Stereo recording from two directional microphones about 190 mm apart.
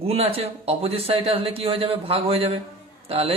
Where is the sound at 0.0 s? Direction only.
30° right (ahead or behind).